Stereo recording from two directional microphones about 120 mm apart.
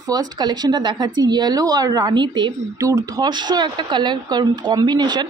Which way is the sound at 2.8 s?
25° right (ahead or behind).